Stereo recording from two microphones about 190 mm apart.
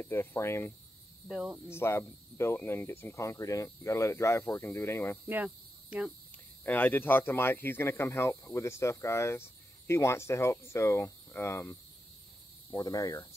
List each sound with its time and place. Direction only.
0.0 s speech: 10° left (ahead or behind)
1.2 s cricket: 5° right (ahead or behind)
1.7 s speech: 15° left (ahead or behind)
5.3 s cricket: 5° right (ahead or behind)
6.6 s speech: 10° left (ahead or behind)
12.7 s cricket: 20° left (ahead or behind)